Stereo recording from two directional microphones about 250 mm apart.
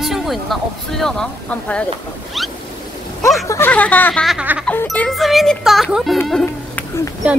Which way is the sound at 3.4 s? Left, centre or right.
Centre.